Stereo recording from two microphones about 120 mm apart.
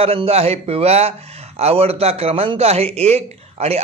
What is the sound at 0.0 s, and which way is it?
A man's voice, 55° right (ahead or behind).